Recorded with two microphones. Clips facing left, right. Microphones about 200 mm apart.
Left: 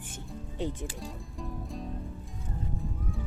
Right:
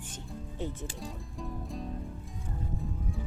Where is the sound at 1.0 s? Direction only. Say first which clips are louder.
Even; centre (ahead or behind).